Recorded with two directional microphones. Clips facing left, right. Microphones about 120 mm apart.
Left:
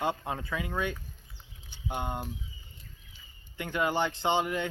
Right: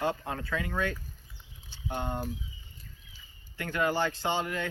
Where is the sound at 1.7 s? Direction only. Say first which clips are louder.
Even; 15° left (ahead or behind).